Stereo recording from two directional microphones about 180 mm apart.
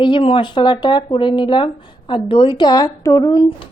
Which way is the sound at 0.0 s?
30° left (ahead or behind).